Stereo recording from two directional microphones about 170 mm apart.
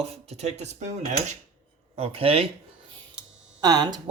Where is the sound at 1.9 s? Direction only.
35° right (ahead or behind).